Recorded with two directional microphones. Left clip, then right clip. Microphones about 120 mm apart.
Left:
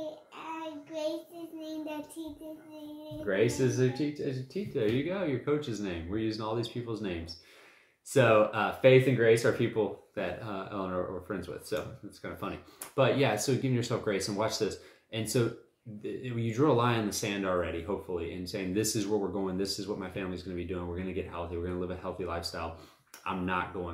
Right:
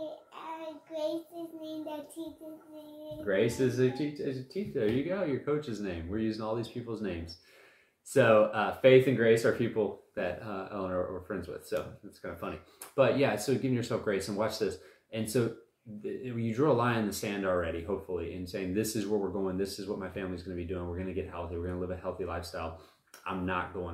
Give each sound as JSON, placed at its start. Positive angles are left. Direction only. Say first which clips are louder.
{"t": 2.2, "sound": "a child's voice", "louder": "even", "side_deg": -20}
{"t": 3.3, "sound": "speech", "louder": "even", "side_deg": 15}
{"t": 9.6, "sound": "speech", "louder": "left 1 dB", "side_deg": 25}